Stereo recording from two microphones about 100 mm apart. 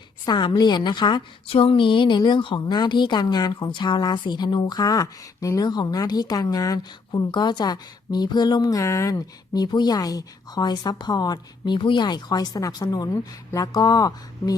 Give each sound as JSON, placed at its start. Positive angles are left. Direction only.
{"t": 0.3, "sound": "a woman's voice", "side_deg": 45}